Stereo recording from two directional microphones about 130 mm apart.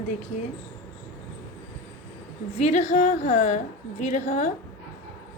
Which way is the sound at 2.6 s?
60° left (ahead or behind).